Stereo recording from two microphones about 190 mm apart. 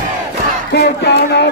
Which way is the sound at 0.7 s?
60° left (ahead or behind).